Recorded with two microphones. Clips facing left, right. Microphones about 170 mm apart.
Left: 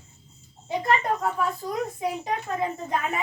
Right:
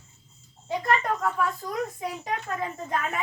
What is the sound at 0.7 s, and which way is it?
A woman's voice, 25° left (ahead or behind).